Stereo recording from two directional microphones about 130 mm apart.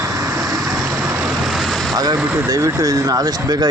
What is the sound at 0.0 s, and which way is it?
Vehicle, 25° right (ahead or behind).